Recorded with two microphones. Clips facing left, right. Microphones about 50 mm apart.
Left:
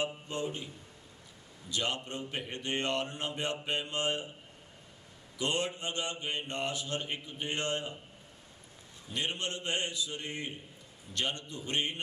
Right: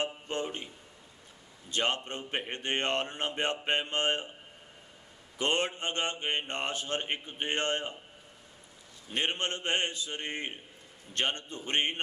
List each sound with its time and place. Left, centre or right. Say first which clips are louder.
0.3 s mantra: right 2 dB; right
1.7 s mantra: right 3 dB; right
5.4 s mantra: right 3 dB; right
9.1 s mantra: right 3 dB; right